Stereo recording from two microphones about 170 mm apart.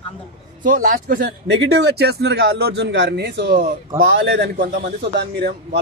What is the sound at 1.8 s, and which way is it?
Speech, 70° right (ahead or behind).